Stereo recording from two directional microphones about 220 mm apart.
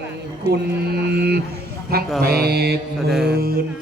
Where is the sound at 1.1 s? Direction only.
45° right (ahead or behind).